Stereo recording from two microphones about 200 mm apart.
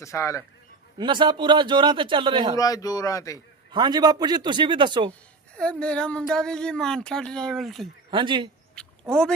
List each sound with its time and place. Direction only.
0.0 s speech: 15° left (ahead or behind)
0.9 s a man's voice: 25° right (ahead or behind)
2.6 s speech: 20° left (ahead or behind)
3.7 s a man's voice: 20° right (ahead or behind)
5.5 s speech: 5° left (ahead or behind)
8.1 s a man's voice: 25° right (ahead or behind)
8.7 s a sound: 5° left (ahead or behind)